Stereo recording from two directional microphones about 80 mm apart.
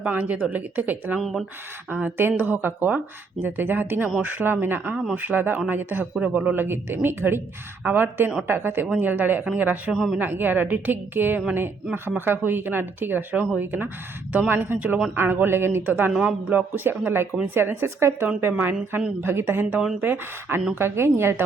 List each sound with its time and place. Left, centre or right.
0.0 s speech: centre
1.2 s speech: centre
1.9 s speech: right
9.9 s speech: centre
10.2 s speech: right